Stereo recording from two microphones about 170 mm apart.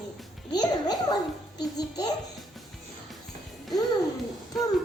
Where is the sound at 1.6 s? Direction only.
25° left (ahead or behind).